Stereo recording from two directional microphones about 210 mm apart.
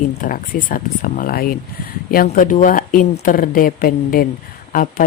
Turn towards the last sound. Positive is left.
turn(degrees=40)  # may be behind; listen again after turning